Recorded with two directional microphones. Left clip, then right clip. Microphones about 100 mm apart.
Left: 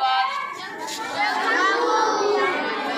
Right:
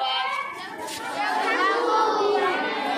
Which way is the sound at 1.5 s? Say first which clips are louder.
Left 2 dB; 40° left (ahead or behind).